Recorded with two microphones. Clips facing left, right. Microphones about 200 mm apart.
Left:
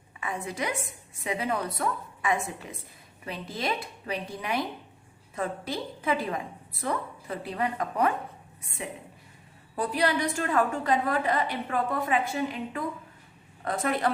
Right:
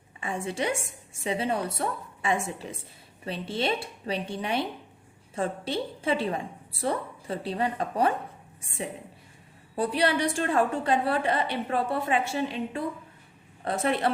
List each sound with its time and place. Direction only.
0.2 s a woman's voice: 30° right (ahead or behind)
9.7 s a woman's voice: 25° right (ahead or behind)